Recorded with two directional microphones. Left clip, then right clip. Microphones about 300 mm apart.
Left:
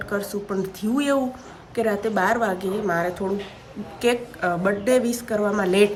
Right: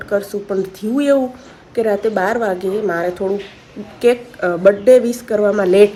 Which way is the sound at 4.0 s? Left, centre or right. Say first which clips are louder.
Right 7 dB; centre.